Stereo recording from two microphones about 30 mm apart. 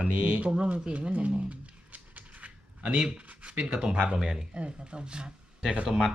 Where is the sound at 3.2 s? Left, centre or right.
Right.